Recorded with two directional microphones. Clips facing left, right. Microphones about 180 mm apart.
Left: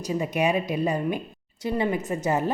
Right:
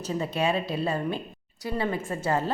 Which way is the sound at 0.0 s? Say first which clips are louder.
Left 2 dB; 15° left (ahead or behind).